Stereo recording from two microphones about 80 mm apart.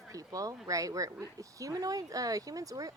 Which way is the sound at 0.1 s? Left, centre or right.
Right.